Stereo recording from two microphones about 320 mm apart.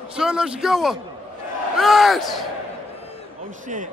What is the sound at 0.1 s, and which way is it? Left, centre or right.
A man's voice, centre.